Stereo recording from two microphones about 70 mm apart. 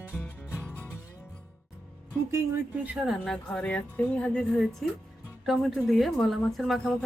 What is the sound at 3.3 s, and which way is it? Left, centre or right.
Speech, centre.